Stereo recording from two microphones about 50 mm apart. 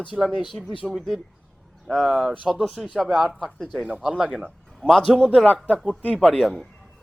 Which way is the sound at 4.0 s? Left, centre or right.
Centre.